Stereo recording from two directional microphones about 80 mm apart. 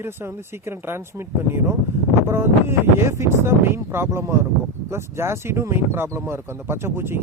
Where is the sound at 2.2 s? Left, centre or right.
Right.